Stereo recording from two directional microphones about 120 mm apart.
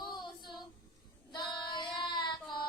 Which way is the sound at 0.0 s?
40° left (ahead or behind).